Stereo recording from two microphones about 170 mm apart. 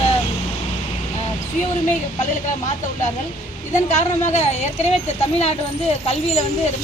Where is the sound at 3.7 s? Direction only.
40° left (ahead or behind).